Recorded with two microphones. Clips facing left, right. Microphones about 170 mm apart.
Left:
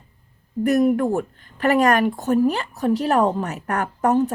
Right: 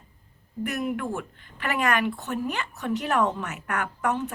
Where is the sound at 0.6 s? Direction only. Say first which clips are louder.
Left 11 dB; 40° left (ahead or behind).